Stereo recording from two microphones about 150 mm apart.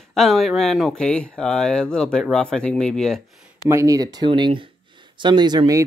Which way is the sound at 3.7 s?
20° right (ahead or behind).